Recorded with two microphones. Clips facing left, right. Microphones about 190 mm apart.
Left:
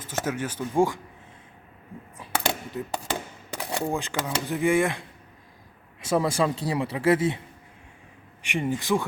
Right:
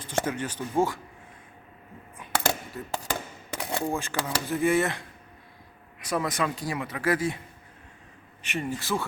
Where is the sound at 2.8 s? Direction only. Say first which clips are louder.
Left 2 dB; 15° left (ahead or behind).